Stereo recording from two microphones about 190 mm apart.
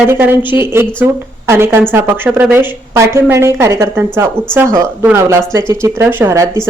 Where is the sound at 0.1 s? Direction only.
10° right (ahead or behind).